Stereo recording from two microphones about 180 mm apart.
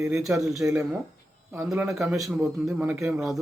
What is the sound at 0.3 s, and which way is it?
Speech, 15° right (ahead or behind).